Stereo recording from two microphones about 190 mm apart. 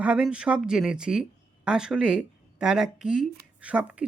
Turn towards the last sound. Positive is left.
turn(degrees=-5)  # may be behind; listen again after turning